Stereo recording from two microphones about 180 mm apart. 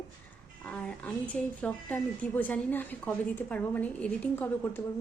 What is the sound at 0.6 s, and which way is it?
A woman's voice, 5° left (ahead or behind).